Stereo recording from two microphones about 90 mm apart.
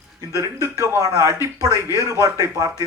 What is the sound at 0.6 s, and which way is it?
Speech, 35° right (ahead or behind).